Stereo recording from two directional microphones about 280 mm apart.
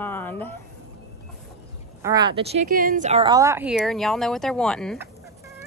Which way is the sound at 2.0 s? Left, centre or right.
Centre.